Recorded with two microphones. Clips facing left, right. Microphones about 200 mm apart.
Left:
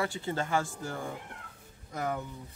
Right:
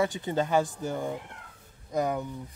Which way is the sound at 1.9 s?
20° right (ahead or behind).